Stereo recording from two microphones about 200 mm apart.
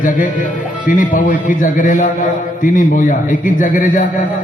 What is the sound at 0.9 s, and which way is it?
A man's voice, 40° left (ahead or behind).